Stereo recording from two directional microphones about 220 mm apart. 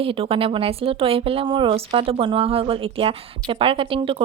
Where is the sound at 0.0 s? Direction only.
25° right (ahead or behind).